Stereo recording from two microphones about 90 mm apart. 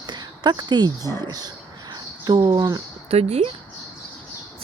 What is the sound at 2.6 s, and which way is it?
Speech, 40° right (ahead or behind).